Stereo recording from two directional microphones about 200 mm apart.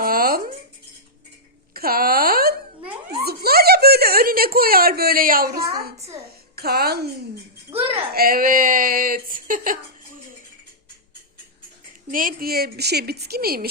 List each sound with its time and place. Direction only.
0.0 s music: 45° right (ahead or behind)
1.7 s a sound: 50° right (ahead or behind)
3.2 s a woman's voice: 50° right (ahead or behind)
8.1 s a woman's voice: 45° right (ahead or behind)
12.1 s a woman's voice: 45° right (ahead or behind)